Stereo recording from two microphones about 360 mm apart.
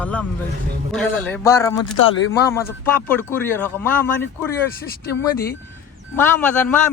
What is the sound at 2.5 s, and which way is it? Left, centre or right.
Speech, centre.